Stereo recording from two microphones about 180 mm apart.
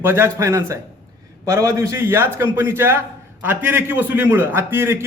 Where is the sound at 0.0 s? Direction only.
15° right (ahead or behind).